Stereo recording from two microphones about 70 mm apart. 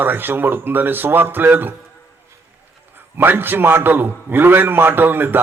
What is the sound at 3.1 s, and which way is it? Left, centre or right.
A man's voice, right.